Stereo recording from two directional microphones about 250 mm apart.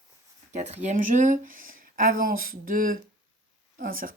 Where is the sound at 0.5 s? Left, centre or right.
Right.